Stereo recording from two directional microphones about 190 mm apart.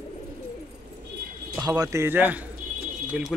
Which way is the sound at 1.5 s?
20° right (ahead or behind).